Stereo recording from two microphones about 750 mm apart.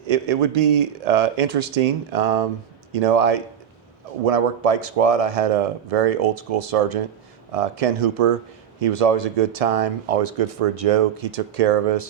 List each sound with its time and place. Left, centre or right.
0.1 s speech: right